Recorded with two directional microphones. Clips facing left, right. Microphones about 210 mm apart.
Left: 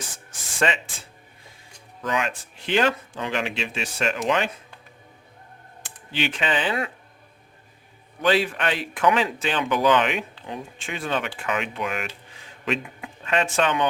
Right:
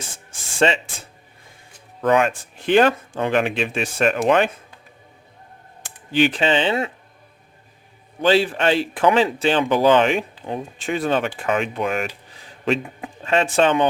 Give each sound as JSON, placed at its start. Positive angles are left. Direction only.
{"t": 0.0, "sound": "music", "side_deg": -25}
{"t": 2.0, "sound": "speech", "side_deg": -55}
{"t": 5.8, "sound": "speech", "side_deg": -45}
{"t": 8.2, "sound": "speech", "side_deg": -30}